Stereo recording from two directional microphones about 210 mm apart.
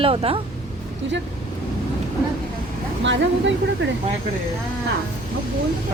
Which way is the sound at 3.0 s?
60° right (ahead or behind).